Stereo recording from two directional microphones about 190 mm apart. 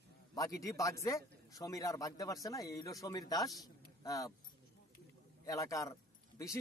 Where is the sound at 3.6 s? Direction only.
20° left (ahead or behind).